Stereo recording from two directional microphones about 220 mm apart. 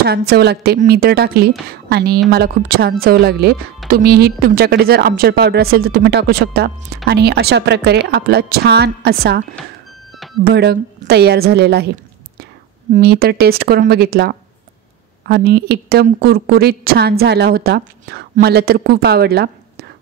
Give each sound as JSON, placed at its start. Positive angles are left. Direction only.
{"t": 0.0, "sound": "a woman's voice", "side_deg": -45}
{"t": 10.4, "sound": "a woman's voice", "side_deg": -45}
{"t": 12.9, "sound": "a woman's voice", "side_deg": -45}